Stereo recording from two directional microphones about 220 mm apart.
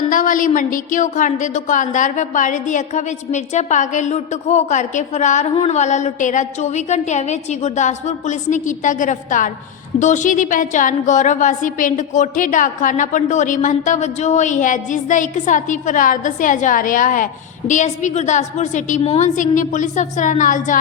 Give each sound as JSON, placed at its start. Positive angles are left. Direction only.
{"t": 0.1, "sound": "a woman's voice", "side_deg": 35}